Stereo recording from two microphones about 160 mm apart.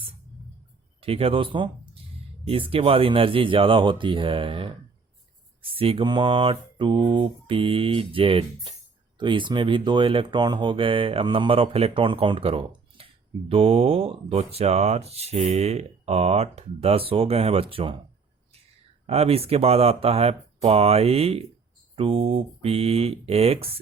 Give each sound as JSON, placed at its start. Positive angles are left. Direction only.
{"t": 1.0, "sound": "speech", "side_deg": -35}
{"t": 19.0, "sound": "speech", "side_deg": -40}